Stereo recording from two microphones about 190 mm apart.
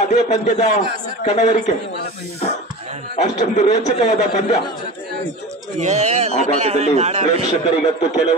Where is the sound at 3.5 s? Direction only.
35° left (ahead or behind).